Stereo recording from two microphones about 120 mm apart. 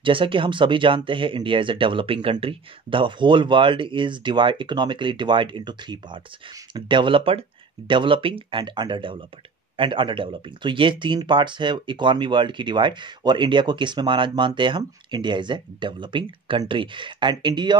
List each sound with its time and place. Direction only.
0.0 s speech: 45° right (ahead or behind)